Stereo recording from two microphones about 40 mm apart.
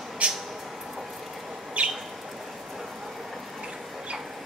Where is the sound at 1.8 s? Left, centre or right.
Right.